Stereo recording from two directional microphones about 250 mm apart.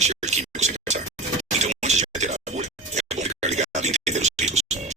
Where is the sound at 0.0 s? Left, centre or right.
Right.